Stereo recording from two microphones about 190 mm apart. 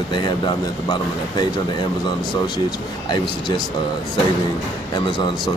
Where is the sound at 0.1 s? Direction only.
25° left (ahead or behind).